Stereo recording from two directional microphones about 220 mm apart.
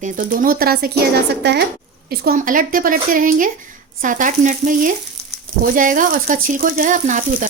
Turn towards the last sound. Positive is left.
turn(degrees=-35)  # may be behind; listen again after turning